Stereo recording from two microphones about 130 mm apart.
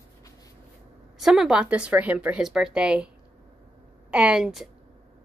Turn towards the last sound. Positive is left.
turn(degrees=-5)  # may be behind; listen again after turning